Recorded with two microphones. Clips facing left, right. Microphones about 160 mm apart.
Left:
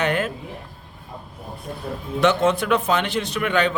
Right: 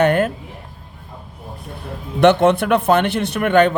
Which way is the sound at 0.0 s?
50° right (ahead or behind).